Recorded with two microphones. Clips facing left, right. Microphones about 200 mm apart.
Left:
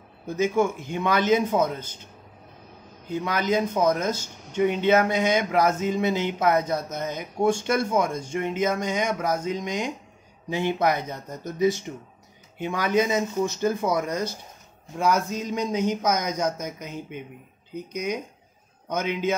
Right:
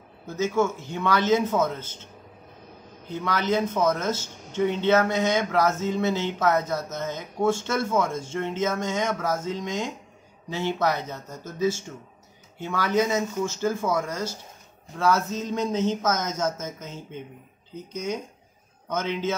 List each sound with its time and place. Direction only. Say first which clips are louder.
0.3 s speech: left 1 dB; 15° left (ahead or behind)
3.1 s speech: left 1 dB; 15° left (ahead or behind)